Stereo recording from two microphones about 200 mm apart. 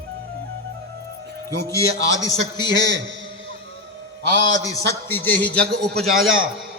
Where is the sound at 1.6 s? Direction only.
15° left (ahead or behind).